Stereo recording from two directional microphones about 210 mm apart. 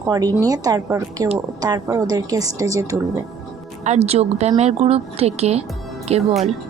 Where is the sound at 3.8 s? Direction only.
30° right (ahead or behind).